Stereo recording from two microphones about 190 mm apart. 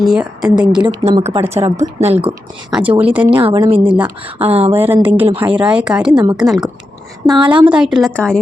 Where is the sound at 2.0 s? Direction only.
35° right (ahead or behind).